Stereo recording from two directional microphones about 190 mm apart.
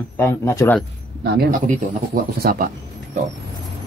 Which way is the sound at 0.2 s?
15° left (ahead or behind).